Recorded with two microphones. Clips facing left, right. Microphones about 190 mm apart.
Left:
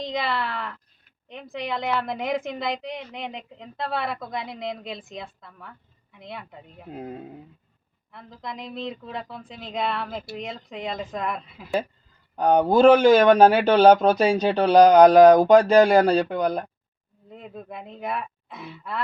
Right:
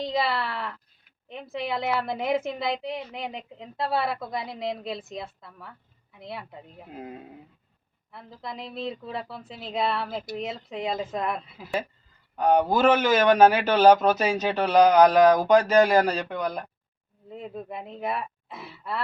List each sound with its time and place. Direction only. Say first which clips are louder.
0.0 s a woman's voice: right 1 dB; 5° right (ahead or behind)
8.1 s a woman's voice: left 1 dB; 5° right (ahead or behind)
12.4 s speech: left 4 dB; 30° left (ahead or behind)
17.3 s a woman's voice: right 2 dB; centre (ahead or behind)